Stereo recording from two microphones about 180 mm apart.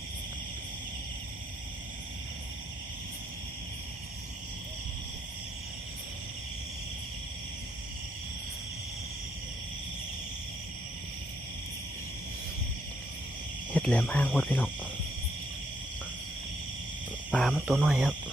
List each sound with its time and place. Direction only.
13.7 s speech: 5° left (ahead or behind)
17.3 s speech: centre (ahead or behind)